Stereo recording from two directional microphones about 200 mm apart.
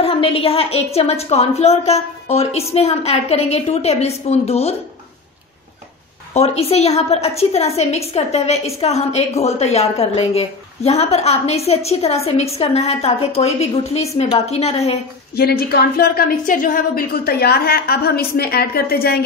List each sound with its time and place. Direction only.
0.0 s a woman's voice: 30° left (ahead or behind)
6.3 s a woman's voice: 30° left (ahead or behind)
15.3 s a woman's voice: 50° left (ahead or behind)